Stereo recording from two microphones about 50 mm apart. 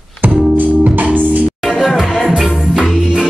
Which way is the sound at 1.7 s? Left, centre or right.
Centre.